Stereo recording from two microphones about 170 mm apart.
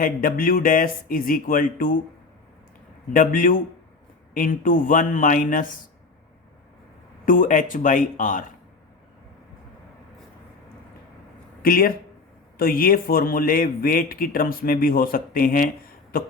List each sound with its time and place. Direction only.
0.0 s speech: 55° left (ahead or behind)
3.1 s speech: 55° left (ahead or behind)
7.3 s speech: 50° left (ahead or behind)
11.6 s speech: 60° left (ahead or behind)